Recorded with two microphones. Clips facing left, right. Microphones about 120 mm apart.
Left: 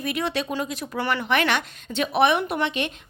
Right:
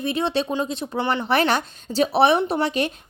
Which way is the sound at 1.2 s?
35° right (ahead or behind).